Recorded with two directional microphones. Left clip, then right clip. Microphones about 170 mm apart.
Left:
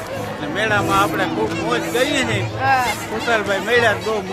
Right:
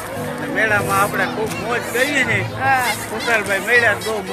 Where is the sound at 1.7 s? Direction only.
20° left (ahead or behind).